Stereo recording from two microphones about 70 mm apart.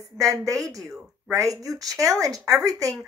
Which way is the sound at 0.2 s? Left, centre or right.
Right.